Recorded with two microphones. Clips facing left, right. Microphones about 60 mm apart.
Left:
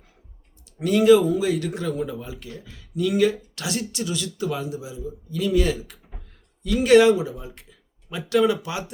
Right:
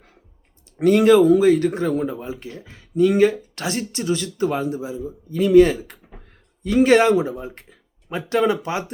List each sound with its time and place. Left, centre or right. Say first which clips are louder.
0.8 s speech: right 3 dB; right